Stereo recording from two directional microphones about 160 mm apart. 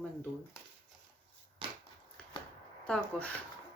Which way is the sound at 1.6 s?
30° right (ahead or behind).